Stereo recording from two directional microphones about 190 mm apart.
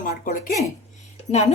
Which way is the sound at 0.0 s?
45° left (ahead or behind).